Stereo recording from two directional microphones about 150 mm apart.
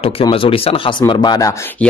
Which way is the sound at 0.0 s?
35° left (ahead or behind).